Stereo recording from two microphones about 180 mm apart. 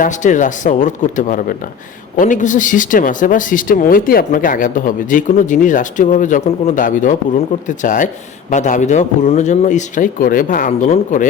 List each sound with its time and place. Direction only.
0.0 s speech: 45° left (ahead or behind)